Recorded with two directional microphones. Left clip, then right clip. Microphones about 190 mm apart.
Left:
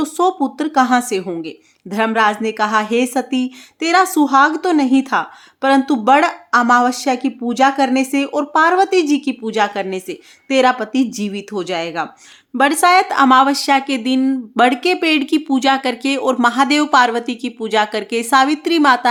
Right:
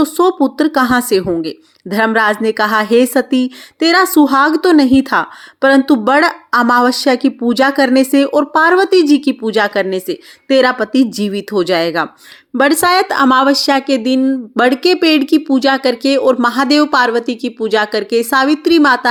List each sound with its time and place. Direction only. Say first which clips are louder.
0.0 s a woman's voice: right 4 dB; 15° right (ahead or behind)
14.2 s speech: right 3 dB; centre (ahead or behind)
14.6 s a woman's voice: right 3 dB; 15° right (ahead or behind)